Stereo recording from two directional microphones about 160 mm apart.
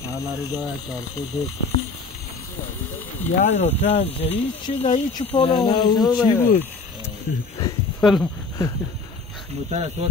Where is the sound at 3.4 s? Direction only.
45° left (ahead or behind); by 6.1 s 25° left (ahead or behind).